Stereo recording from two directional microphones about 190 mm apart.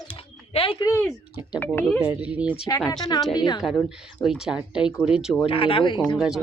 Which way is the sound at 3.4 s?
20° left (ahead or behind).